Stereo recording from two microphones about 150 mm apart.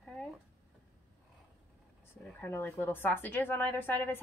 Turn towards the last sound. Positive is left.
turn(degrees=10)  # may be behind; listen again after turning